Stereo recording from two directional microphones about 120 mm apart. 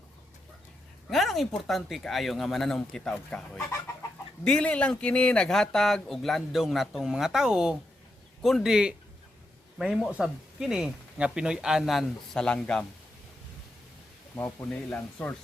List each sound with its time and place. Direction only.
1.1 s speech: centre (ahead or behind)
14.3 s speech: 20° left (ahead or behind)
14.7 s speech: 10° left (ahead or behind)